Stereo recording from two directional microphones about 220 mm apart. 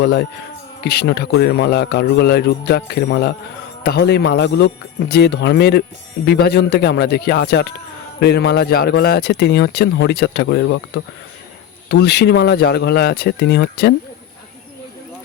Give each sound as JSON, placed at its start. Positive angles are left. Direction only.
{"t": 0.0, "sound": "speech", "side_deg": 45}